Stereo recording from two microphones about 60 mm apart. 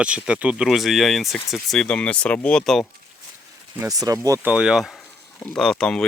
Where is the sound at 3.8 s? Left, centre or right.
Right.